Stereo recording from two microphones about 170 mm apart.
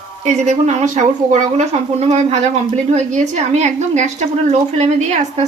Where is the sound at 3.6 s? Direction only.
45° right (ahead or behind).